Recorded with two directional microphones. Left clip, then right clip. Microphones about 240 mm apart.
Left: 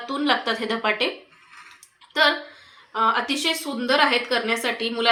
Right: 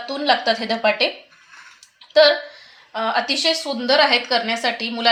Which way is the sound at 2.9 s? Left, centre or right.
Right.